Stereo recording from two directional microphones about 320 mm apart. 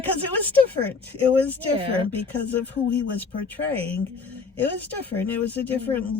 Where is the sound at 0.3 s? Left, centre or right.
Centre.